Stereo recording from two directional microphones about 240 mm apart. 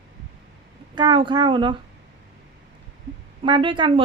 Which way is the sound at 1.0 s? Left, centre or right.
Centre.